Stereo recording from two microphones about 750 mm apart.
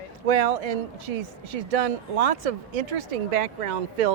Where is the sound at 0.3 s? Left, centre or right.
Right.